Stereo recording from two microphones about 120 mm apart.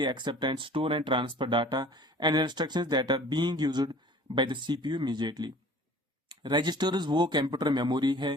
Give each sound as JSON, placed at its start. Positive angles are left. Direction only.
{"t": 0.0, "sound": "speech", "side_deg": -40}